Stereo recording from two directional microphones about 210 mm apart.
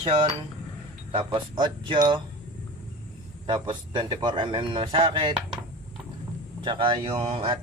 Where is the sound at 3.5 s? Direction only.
25° right (ahead or behind).